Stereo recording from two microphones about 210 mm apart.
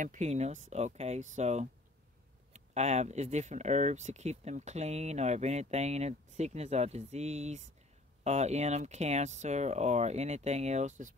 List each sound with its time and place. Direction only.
0.0 s speech: 35° right (ahead or behind)